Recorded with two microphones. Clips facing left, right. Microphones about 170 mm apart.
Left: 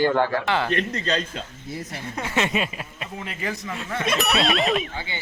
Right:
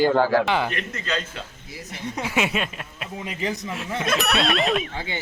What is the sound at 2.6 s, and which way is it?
Speech, 5° left (ahead or behind).